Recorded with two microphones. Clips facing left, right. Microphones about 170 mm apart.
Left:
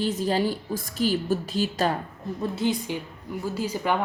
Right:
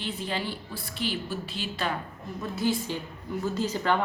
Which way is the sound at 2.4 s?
20° left (ahead or behind).